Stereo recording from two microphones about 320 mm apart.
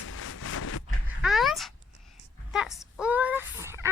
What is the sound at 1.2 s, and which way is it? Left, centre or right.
A child's voice, centre.